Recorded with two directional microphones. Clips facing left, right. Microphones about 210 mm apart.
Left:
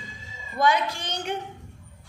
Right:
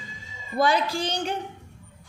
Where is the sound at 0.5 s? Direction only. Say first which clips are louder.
Right 1 dB; 35° right (ahead or behind).